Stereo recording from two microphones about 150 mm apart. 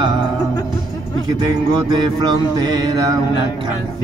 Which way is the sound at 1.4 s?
30° right (ahead or behind).